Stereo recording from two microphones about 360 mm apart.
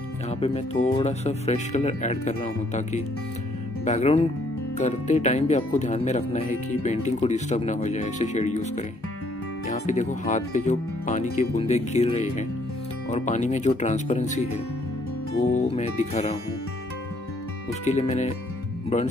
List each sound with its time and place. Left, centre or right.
0.3 s speech: centre
15.5 s speech: centre
17.8 s speech: centre